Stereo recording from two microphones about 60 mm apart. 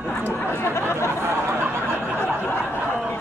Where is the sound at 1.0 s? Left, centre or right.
Right.